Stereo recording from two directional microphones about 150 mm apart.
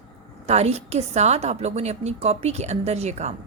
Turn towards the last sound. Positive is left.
turn(degrees=-50)  # may be behind; listen again after turning